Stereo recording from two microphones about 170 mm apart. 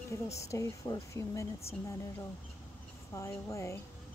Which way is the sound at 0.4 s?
15° left (ahead or behind).